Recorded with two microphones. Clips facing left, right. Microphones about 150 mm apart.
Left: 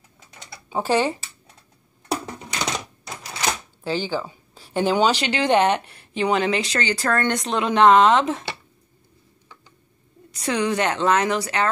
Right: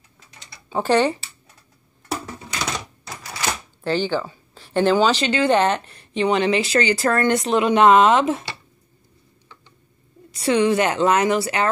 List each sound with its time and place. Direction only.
0.7 s speech: 10° left (ahead or behind)
2.3 s typewriter: 20° left (ahead or behind)
3.8 s a woman's voice: 5° left (ahead or behind)
10.3 s a woman's voice: 5° right (ahead or behind)